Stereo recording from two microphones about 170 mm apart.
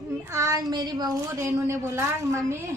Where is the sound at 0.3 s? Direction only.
15° right (ahead or behind).